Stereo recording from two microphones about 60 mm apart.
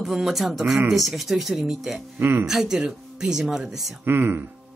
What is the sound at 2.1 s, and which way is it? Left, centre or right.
Speech, right.